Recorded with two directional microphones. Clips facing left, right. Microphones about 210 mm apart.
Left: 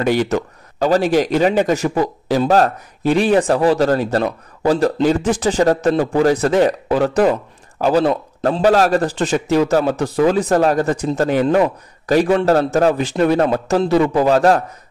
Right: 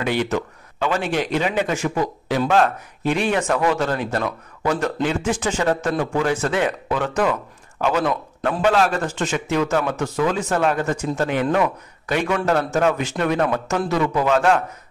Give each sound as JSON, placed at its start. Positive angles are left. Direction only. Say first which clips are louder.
{"t": 0.0, "sound": "a man's voice", "louder": "left 5 dB", "side_deg": 40}